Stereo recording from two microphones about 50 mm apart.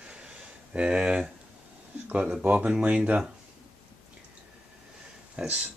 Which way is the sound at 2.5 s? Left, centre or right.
Right.